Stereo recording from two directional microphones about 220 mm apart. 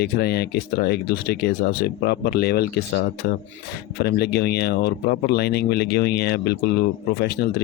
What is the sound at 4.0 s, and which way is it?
Speech, 45° left (ahead or behind).